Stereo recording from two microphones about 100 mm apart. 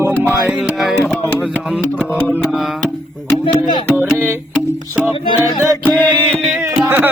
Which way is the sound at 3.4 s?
55° left (ahead or behind).